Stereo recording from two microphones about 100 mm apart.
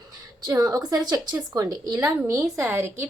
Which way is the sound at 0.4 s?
40° right (ahead or behind).